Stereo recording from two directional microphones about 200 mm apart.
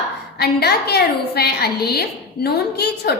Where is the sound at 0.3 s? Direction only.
55° left (ahead or behind).